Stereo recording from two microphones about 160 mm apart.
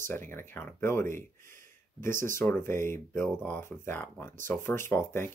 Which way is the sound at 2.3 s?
15° left (ahead or behind).